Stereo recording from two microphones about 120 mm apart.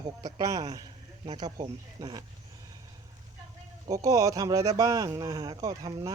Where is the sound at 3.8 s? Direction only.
30° right (ahead or behind).